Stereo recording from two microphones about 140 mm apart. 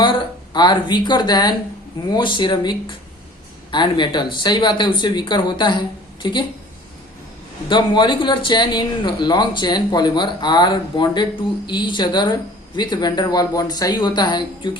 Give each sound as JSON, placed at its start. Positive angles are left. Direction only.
{"t": 0.0, "sound": "a man's voice", "side_deg": 35}
{"t": 7.7, "sound": "a man's voice", "side_deg": 35}